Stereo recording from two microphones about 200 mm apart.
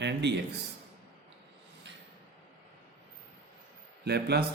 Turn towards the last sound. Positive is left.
turn(degrees=-55)  # may be behind; listen again after turning